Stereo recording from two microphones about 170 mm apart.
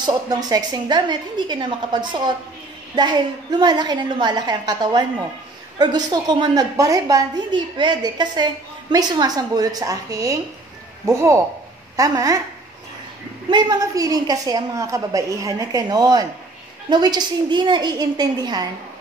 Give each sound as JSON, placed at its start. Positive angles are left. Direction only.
{"t": 0.0, "sound": "a woman's voice", "side_deg": -20}
{"t": 13.5, "sound": "a woman's voice", "side_deg": -25}